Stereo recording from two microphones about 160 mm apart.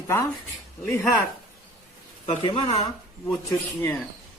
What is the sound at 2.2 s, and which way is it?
Speech, 35° left (ahead or behind).